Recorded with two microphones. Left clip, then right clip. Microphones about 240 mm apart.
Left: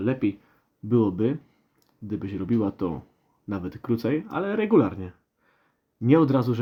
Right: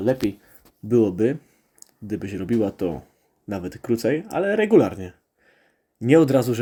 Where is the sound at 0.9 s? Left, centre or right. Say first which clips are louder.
Right 4 dB; centre.